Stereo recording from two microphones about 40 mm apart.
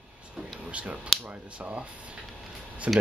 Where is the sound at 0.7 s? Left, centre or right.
Right.